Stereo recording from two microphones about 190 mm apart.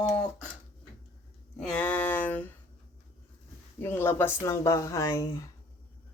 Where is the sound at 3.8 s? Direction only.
10° left (ahead or behind).